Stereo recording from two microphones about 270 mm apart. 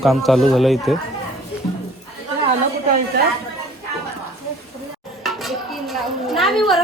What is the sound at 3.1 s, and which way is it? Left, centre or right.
Chatter, right.